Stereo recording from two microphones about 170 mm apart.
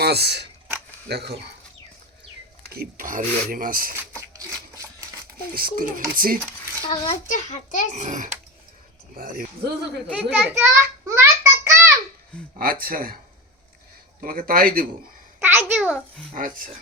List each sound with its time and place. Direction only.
0.0 s speech: 70° right (ahead or behind)
2.6 s speech: 60° right (ahead or behind)
4.2 s a sound: 20° right (ahead or behind)
5.5 s speech: 55° right (ahead or behind)
6.9 s a child's voice: 25° left (ahead or behind)
7.3 s a child's voice: 45° left (ahead or behind)
7.9 s speech: 45° right (ahead or behind)
10.1 s a child's voice: centre (ahead or behind)
10.6 s child singing: 15° right (ahead or behind)
12.3 s speech: 5° left (ahead or behind)
12.8 s speech: 60° right (ahead or behind)
14.2 s speech: 55° right (ahead or behind)
15.5 s a child's voice: 5° right (ahead or behind)
16.3 s speech: 50° right (ahead or behind)